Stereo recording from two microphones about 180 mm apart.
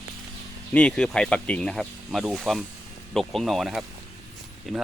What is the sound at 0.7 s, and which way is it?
Speech, 5° left (ahead or behind).